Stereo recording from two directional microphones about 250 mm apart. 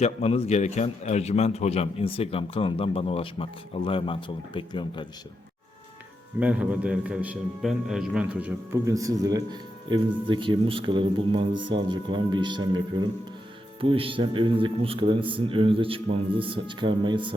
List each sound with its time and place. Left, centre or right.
0.0 s a man's voice: left
6.4 s a man's voice: centre